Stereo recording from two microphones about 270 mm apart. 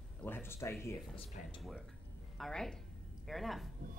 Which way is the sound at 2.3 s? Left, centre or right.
Centre.